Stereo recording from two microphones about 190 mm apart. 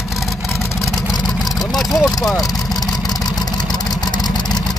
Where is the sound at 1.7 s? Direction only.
Centre (ahead or behind).